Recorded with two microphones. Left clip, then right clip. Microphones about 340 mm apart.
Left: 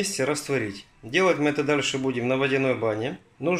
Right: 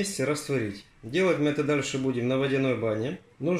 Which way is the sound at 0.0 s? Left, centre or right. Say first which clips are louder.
Left 3 dB; left.